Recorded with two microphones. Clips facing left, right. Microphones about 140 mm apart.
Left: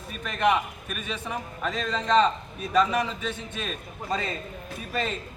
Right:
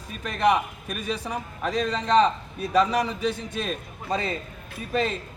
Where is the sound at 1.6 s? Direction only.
10° right (ahead or behind).